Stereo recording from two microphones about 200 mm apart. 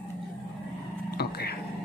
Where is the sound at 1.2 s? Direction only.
50° left (ahead or behind).